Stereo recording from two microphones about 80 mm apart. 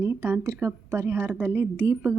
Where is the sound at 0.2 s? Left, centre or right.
Right.